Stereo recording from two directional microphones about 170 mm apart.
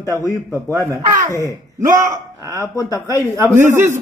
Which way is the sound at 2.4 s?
20° left (ahead or behind).